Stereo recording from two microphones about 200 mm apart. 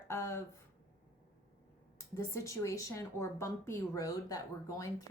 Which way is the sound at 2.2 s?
15° left (ahead or behind).